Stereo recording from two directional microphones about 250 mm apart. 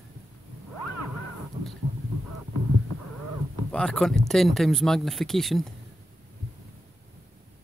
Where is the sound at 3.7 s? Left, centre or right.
Centre.